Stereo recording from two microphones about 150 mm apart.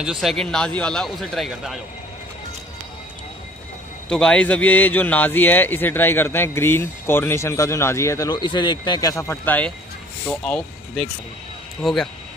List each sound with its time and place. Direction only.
0.0 s speech: centre (ahead or behind)
4.1 s a man's voice: 5° left (ahead or behind)